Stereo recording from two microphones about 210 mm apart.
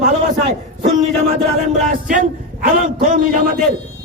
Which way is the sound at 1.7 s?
35° right (ahead or behind).